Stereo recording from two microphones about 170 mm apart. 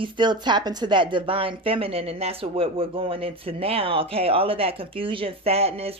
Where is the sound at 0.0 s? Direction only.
25° right (ahead or behind).